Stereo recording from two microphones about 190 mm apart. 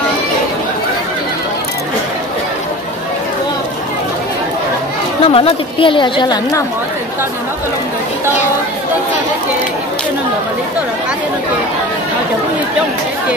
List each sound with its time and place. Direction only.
5.2 s a woman's voice: 30° left (ahead or behind)